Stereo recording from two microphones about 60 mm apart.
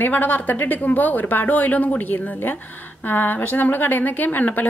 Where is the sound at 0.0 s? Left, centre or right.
Left.